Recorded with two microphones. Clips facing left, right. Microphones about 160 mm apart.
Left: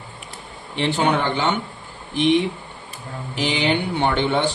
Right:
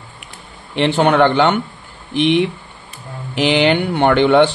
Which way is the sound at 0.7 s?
70° right (ahead or behind).